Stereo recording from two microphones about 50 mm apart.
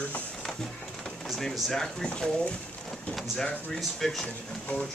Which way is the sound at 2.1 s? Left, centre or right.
Centre.